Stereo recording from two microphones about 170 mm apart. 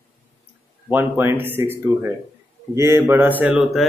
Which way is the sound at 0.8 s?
10° right (ahead or behind).